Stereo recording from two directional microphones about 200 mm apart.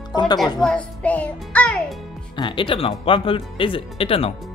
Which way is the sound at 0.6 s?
5° left (ahead or behind).